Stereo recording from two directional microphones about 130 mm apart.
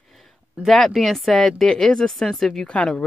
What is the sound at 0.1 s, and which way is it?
Speech, centre (ahead or behind).